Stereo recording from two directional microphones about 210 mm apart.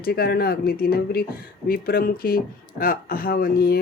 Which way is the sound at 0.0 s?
50° left (ahead or behind).